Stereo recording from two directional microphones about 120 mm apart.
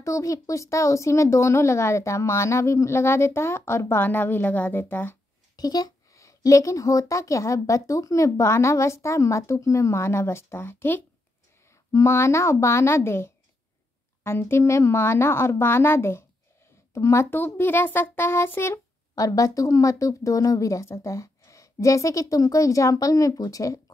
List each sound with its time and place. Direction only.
0.0 s a child's voice: 25° left (ahead or behind)
5.6 s a child's voice: 30° left (ahead or behind)